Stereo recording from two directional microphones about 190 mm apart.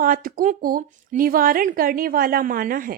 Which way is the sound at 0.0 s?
45° right (ahead or behind).